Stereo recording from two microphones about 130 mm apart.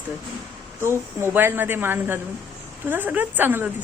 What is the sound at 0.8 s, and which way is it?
Speech, 20° right (ahead or behind).